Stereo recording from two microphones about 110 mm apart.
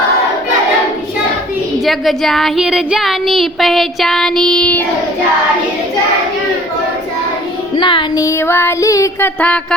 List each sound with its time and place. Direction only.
1.8 s child singing: centre (ahead or behind)
7.8 s music: 50° left (ahead or behind)
8.1 s music: 30° left (ahead or behind)
9.2 s a sound: 10° left (ahead or behind)